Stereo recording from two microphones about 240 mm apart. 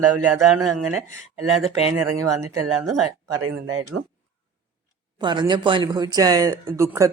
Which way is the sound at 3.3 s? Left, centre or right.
Right.